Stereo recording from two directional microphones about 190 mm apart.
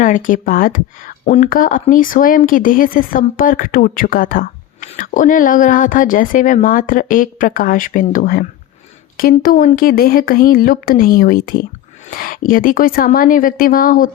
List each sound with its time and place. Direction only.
0.0 s speech: 45° left (ahead or behind)